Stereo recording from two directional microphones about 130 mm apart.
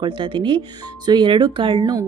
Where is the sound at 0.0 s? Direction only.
40° right (ahead or behind).